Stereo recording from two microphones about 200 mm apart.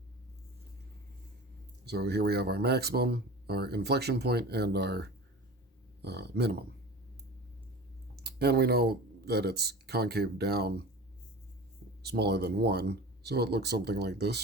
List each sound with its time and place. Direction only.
1.8 s speech: 55° right (ahead or behind)
8.1 s speech: 55° right (ahead or behind)
12.0 s speech: 55° right (ahead or behind)